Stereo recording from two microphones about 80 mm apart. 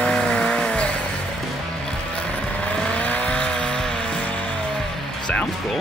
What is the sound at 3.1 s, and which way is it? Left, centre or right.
Vehicle, centre.